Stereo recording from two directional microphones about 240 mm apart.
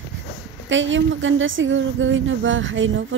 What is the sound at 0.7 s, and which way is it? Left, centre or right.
A woman's voice, right.